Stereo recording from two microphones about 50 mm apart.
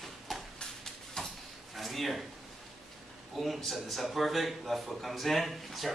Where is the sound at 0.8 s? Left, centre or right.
Centre.